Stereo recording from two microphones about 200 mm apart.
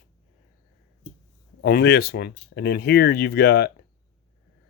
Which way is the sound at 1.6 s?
50° left (ahead or behind).